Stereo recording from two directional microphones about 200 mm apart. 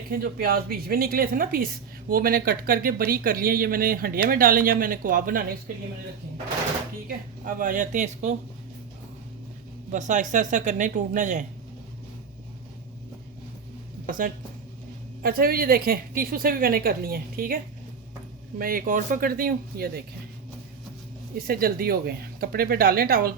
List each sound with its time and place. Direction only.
0.1 s a woman's voice: 45° right (ahead or behind)
7.4 s speech: 40° right (ahead or behind)
9.9 s speech: 40° right (ahead or behind)
14.1 s a woman's voice: 45° right (ahead or behind)
18.6 s a woman's voice: 45° right (ahead or behind)
21.3 s a woman's voice: 50° right (ahead or behind)